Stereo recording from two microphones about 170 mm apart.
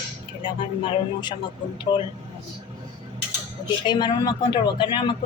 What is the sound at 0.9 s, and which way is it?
Speech, 25° left (ahead or behind).